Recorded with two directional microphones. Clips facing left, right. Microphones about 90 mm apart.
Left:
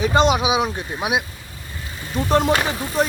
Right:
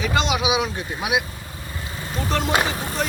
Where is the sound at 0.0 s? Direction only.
40° left (ahead or behind).